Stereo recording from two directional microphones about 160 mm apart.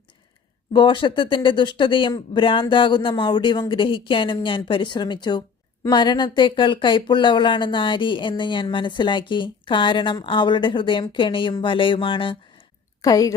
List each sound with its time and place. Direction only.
0.7 s speech: 30° left (ahead or behind)
13.0 s a woman's voice: 20° left (ahead or behind)